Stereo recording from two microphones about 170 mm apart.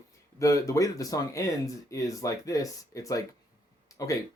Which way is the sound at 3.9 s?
20° left (ahead or behind).